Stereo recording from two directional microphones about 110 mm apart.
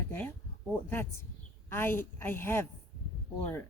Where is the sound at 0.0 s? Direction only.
20° left (ahead or behind).